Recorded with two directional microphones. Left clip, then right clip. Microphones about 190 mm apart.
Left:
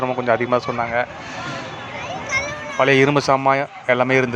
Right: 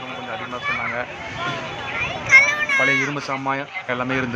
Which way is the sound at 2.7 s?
40° left (ahead or behind).